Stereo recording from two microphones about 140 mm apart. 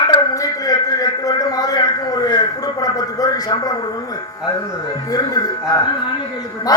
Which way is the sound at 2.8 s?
25° left (ahead or behind).